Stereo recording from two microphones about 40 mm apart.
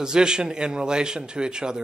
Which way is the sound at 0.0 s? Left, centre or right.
Centre.